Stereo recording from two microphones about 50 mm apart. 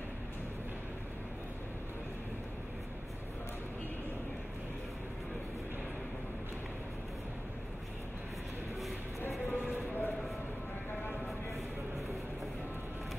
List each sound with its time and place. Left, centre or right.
9.5 s train: left